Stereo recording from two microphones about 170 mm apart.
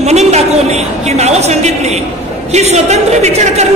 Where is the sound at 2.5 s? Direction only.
40° right (ahead or behind).